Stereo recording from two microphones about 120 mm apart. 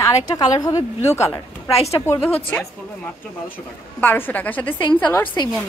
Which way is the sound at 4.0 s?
15° left (ahead or behind).